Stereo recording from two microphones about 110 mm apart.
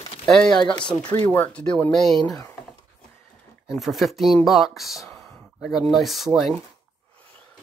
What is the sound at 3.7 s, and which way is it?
Speech, centre (ahead or behind).